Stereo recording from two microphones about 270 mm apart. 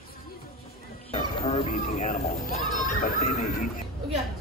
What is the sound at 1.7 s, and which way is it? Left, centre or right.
Speech, left.